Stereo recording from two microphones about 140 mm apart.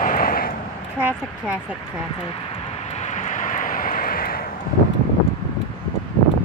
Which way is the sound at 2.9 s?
55° left (ahead or behind).